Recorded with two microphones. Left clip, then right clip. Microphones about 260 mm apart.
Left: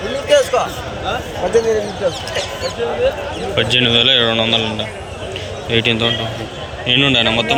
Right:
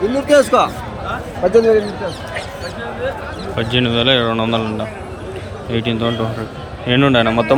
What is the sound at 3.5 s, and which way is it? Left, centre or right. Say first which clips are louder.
Speech: left 4 dB; centre.